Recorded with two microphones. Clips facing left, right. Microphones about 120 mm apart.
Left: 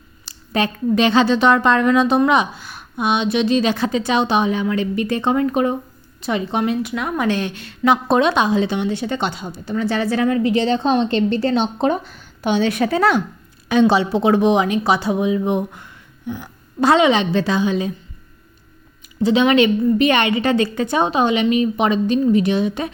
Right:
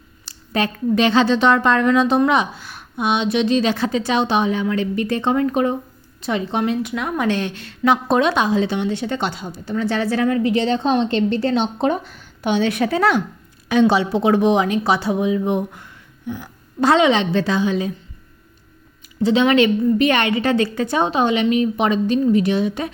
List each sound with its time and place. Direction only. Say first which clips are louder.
0.3 s a woman's voice: left 1 dB; 20° left (ahead or behind)
3.0 s a woman's voice: even; centre (ahead or behind); by 17.9 s 20° left (ahead or behind)
19.0 s a woman's voice: left 1 dB; 15° left (ahead or behind)